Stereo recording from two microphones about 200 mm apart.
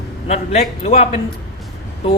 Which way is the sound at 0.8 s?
30° left (ahead or behind).